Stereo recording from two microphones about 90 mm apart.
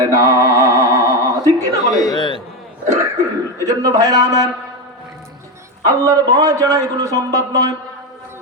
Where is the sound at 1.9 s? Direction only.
45° left (ahead or behind).